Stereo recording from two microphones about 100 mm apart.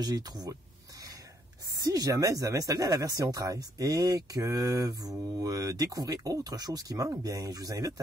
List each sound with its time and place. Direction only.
0.0 s speech: 40° right (ahead or behind)
1.9 s speech: 35° right (ahead or behind)